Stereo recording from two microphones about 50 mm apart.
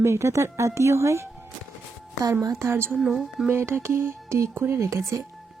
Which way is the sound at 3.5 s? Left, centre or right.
Right.